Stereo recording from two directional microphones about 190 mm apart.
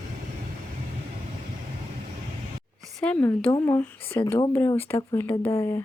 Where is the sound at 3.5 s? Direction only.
20° left (ahead or behind).